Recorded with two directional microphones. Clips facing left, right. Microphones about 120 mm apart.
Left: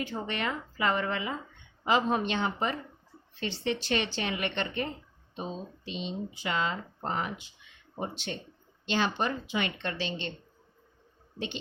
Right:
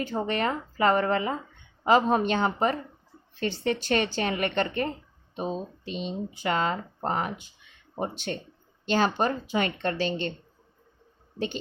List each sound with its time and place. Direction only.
0.0 s speech: 40° right (ahead or behind)